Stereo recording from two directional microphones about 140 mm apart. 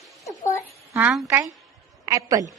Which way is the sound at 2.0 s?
25° right (ahead or behind).